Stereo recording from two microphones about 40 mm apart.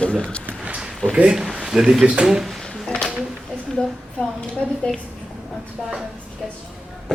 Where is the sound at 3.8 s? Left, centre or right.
Left.